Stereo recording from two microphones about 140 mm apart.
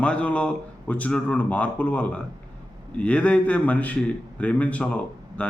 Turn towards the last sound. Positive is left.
turn(degrees=10)  # may be behind; listen again after turning